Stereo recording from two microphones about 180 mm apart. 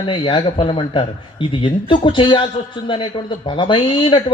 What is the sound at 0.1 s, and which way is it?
Speech, 30° left (ahead or behind).